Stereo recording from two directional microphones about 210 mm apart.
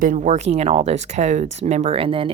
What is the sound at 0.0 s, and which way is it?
Speech, 35° right (ahead or behind).